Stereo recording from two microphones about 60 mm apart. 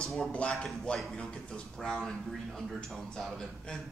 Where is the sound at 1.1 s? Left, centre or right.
Centre.